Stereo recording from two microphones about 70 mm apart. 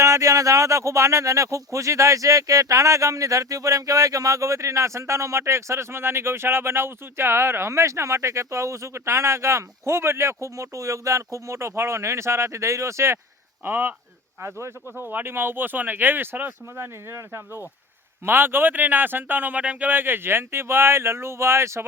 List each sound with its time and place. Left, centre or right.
0.0 s speech: right
13.7 s speech: right
14.9 s speech: right
18.3 s speech: right